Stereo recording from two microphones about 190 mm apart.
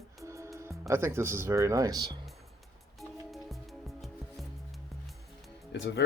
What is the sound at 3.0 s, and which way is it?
Music, centre (ahead or behind).